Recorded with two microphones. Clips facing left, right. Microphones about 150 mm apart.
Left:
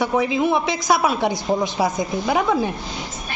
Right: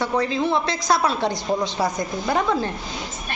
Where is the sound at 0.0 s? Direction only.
10° left (ahead or behind).